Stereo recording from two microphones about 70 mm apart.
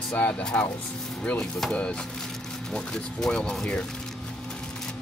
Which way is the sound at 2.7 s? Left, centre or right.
Centre.